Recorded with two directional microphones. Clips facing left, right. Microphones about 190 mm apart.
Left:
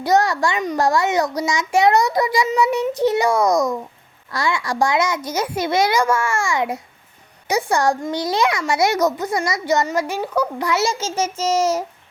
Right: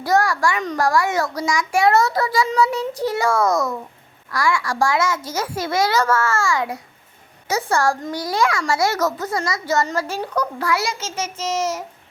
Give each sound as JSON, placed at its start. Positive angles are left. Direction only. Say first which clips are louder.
{"t": 0.0, "sound": "a child's voice", "louder": "left 1 dB", "side_deg": 20}
{"t": 10.7, "sound": "a child's voice", "louder": "left 3 dB", "side_deg": 25}